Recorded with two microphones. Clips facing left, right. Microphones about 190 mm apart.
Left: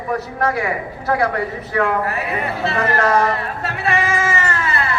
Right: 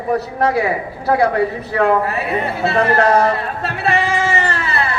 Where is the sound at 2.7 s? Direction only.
30° right (ahead or behind).